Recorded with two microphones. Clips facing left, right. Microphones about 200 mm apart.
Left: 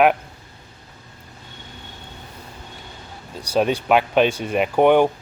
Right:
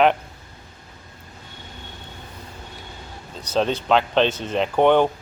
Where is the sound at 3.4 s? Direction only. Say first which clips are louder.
Left 2 dB; 10° left (ahead or behind).